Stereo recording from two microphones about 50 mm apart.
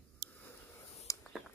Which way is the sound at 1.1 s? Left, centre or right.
Left.